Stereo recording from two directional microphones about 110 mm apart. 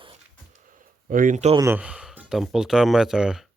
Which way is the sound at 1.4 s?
90° right.